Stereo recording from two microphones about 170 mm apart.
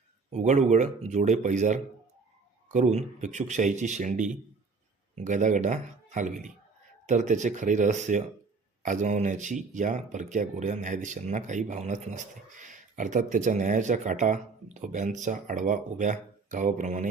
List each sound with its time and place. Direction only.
0.3 s speech: 45° right (ahead or behind)